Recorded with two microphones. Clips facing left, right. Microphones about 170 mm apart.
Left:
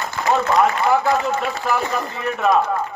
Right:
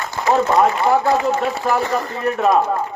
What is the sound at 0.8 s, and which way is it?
A man's voice, 30° right (ahead or behind).